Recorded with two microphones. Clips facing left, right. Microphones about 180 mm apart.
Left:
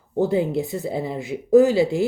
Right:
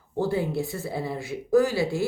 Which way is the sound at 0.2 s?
20° left (ahead or behind).